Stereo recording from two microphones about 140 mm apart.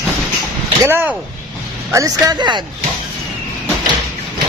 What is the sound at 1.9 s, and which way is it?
Speech, 25° right (ahead or behind).